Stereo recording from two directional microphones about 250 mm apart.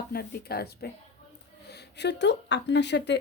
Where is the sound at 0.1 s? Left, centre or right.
Left.